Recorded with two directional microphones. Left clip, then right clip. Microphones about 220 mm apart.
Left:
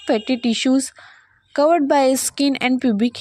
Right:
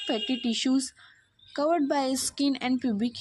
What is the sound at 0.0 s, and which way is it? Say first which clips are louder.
A woman's voice: left 9 dB; 40° left (ahead or behind).